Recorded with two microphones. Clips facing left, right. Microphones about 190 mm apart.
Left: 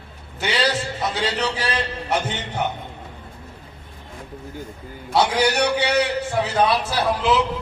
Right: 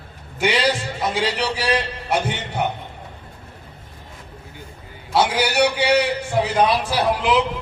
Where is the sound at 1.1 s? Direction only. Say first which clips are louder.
Right 2 dB; 10° right (ahead or behind).